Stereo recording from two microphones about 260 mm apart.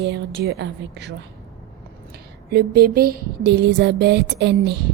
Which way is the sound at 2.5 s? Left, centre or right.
Right.